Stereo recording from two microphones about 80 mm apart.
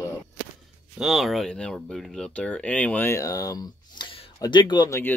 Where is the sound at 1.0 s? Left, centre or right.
Centre.